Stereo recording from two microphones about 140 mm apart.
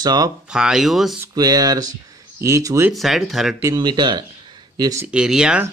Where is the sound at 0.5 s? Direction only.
5° right (ahead or behind).